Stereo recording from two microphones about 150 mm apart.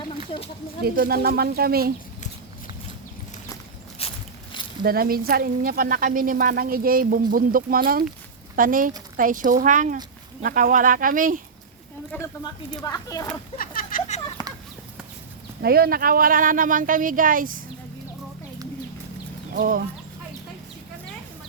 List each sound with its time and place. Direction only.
0.9 s speech: 80° right
4.0 s walk: 40° left (ahead or behind)
4.8 s speech: 80° right
12.1 s speech: 15° left (ahead or behind)
12.7 s speech: 25° left (ahead or behind)
13.6 s a sound: 70° left (ahead or behind)
14.4 s chicken: 25° left (ahead or behind)
15.6 s speech: 90° right; by 17.5 s 65° right (ahead or behind)
19.5 s speech: 70° right (ahead or behind)